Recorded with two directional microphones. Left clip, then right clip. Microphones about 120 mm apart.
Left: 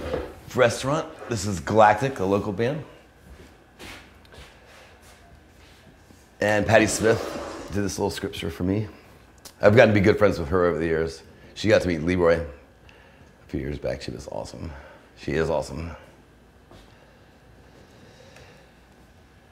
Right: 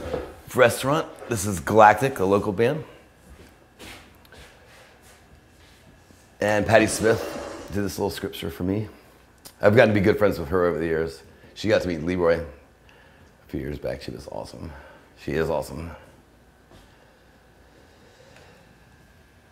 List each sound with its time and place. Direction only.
0.5 s a man's voice: 35° right (ahead or behind)
1.3 s a man's voice: 30° right (ahead or behind)
6.3 s a man's voice: 10° right (ahead or behind)
11.5 s speech: 10° left (ahead or behind)
13.5 s speech: 5° right (ahead or behind)